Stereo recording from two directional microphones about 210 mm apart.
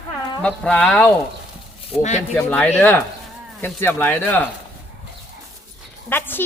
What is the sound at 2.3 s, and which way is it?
Speech, 10° left (ahead or behind).